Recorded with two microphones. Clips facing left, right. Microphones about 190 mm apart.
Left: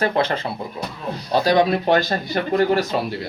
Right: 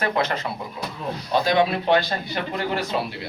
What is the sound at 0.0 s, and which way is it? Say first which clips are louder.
Speech: left 3 dB; 30° left (ahead or behind).